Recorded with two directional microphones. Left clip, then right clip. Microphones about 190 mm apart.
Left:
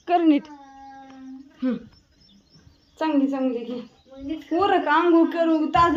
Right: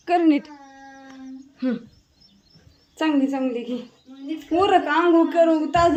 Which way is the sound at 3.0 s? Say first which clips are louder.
Right 1 dB; 5° right (ahead or behind).